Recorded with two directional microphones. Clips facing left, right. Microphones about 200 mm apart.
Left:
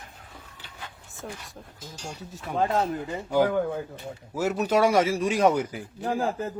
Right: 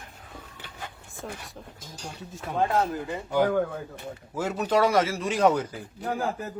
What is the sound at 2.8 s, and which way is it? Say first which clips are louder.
A man's voice: even; 15° left (ahead or behind).